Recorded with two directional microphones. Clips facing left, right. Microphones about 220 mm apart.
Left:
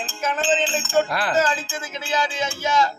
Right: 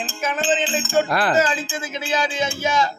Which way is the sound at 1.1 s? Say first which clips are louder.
Right 4 dB; 50° right (ahead or behind).